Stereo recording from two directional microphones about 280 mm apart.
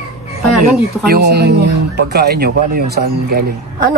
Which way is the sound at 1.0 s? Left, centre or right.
Right.